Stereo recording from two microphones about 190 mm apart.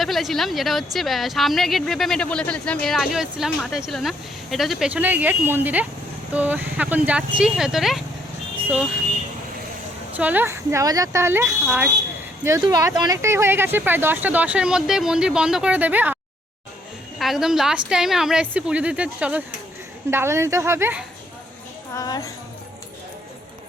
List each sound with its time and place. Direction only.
0.0 s speech: centre (ahead or behind)
10.1 s speech: 10° right (ahead or behind)
12.5 s speech: 15° right (ahead or behind)
17.2 s speech: centre (ahead or behind)
21.9 s speech: 20° left (ahead or behind)